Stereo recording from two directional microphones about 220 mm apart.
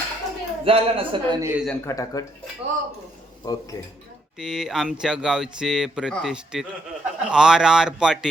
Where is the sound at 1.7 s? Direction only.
15° left (ahead or behind).